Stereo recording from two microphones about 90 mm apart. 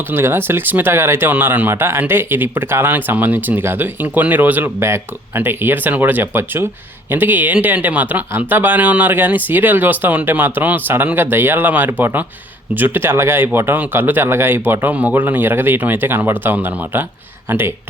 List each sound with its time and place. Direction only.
0.1 s speech: 25° right (ahead or behind)